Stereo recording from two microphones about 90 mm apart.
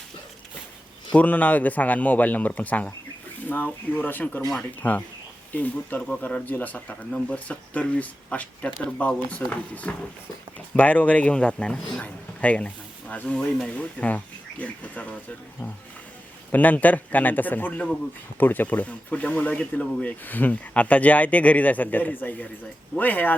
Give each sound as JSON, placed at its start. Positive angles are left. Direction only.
{"t": 1.1, "sound": "a man's voice", "side_deg": 20}
{"t": 16.5, "sound": "a man's voice", "side_deg": 20}